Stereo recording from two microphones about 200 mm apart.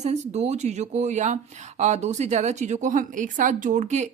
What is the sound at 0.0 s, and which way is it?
Speech, 35° right (ahead or behind).